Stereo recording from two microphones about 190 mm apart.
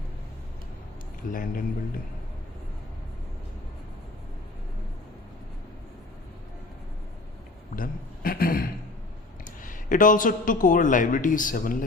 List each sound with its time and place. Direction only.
1.3 s speech: 45° left (ahead or behind)
7.8 s a sound: 50° left (ahead or behind)
9.4 s speech: 45° left (ahead or behind)